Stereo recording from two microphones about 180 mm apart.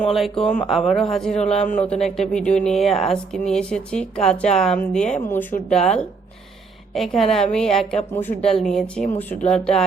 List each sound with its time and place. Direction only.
0.0 s a woman's voice: centre (ahead or behind)
1.4 s a man's voice: 35° left (ahead or behind)
1.9 s a woman's voice: centre (ahead or behind)
6.9 s a woman's voice: centre (ahead or behind)